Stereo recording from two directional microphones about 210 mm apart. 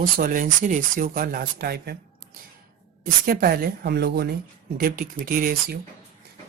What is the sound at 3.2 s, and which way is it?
Speech, 45° right (ahead or behind).